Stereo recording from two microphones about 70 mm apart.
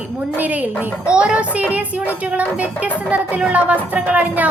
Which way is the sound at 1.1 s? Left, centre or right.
Centre.